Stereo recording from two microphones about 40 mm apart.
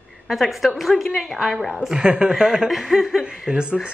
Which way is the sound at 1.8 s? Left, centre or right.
Centre.